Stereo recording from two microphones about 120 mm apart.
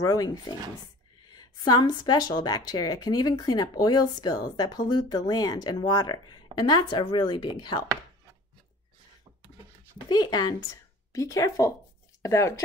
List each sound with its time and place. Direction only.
0.0 s speech: 30° left (ahead or behind)
10.0 s speech: 35° left (ahead or behind)